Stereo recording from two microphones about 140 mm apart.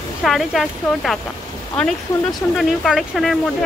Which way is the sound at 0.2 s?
Centre (ahead or behind).